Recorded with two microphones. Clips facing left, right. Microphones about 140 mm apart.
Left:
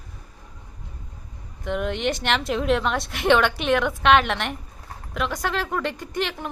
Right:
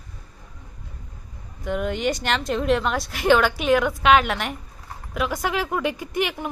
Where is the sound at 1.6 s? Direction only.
Centre (ahead or behind).